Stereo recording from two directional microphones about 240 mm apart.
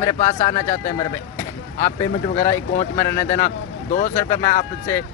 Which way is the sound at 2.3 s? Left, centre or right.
Centre.